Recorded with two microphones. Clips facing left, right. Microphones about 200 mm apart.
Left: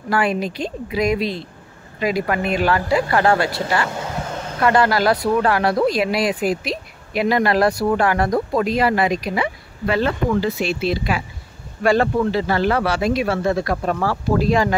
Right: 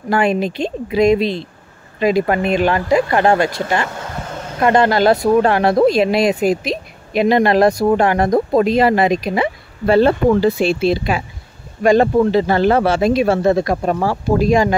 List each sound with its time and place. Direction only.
0.1 s speech: 25° right (ahead or behind)
4.6 s speech: 25° right (ahead or behind)